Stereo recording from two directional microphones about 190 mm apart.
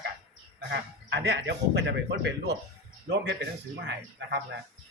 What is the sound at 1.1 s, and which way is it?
Speech, 65° right (ahead or behind).